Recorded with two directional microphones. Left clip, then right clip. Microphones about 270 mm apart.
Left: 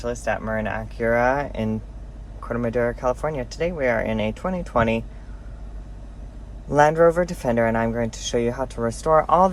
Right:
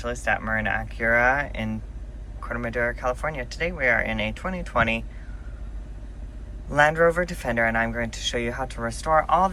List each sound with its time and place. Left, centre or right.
0.0 s speech: left
6.7 s speech: left